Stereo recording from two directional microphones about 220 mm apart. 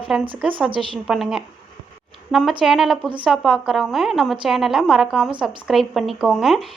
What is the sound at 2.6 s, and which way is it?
A woman's voice, centre (ahead or behind).